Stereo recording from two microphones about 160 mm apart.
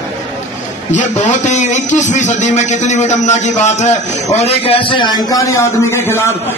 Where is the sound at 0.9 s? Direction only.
50° left (ahead or behind).